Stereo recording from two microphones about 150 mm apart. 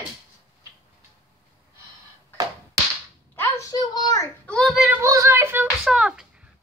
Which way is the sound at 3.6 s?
25° left (ahead or behind).